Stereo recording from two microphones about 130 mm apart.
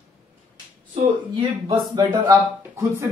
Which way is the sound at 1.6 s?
35° right (ahead or behind).